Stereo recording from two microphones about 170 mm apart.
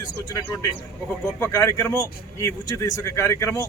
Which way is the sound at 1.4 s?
10° left (ahead or behind).